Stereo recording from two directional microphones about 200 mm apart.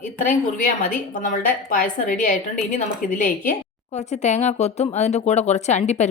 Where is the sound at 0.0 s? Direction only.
40° left (ahead or behind).